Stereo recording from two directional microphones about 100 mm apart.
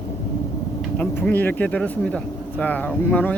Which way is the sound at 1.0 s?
20° left (ahead or behind).